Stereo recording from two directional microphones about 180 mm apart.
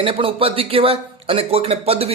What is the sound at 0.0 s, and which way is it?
Speech, 30° right (ahead or behind).